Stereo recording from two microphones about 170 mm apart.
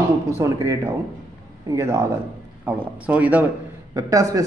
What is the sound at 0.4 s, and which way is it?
Speech, 15° right (ahead or behind).